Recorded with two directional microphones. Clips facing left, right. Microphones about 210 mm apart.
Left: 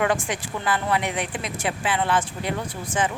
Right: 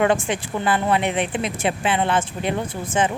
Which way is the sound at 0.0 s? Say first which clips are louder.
Right 4 dB; 25° right (ahead or behind).